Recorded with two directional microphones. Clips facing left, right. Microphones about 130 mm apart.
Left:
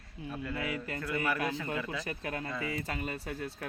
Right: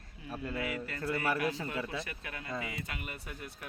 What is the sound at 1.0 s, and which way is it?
Speech, 30° right (ahead or behind).